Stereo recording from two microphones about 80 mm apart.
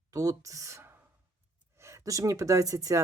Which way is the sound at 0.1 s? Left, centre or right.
Right.